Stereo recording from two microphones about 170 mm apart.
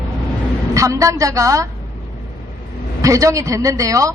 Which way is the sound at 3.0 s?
20° right (ahead or behind).